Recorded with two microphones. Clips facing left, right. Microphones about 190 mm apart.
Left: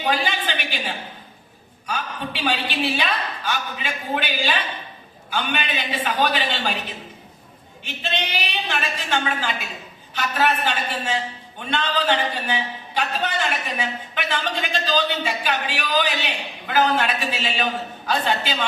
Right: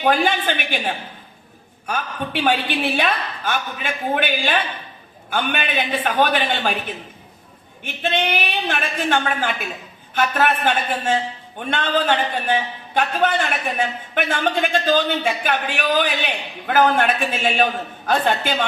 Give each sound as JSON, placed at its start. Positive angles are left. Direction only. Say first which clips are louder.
{"t": 0.0, "sound": "a man's voice", "louder": "right 5 dB", "side_deg": -50}